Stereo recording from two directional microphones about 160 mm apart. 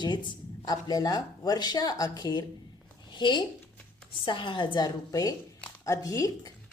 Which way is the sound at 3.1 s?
30° left (ahead or behind).